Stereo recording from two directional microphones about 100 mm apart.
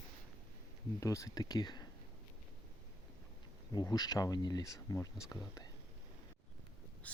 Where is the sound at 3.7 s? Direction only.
45° left (ahead or behind).